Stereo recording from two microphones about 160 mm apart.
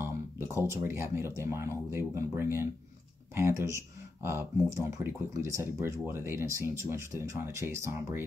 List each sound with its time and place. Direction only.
0.0 s speech: 15° right (ahead or behind)